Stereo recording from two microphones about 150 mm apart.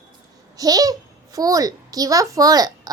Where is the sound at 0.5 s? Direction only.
25° right (ahead or behind).